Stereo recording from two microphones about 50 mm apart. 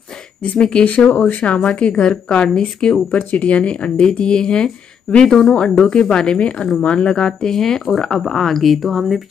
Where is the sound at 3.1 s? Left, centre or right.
Left.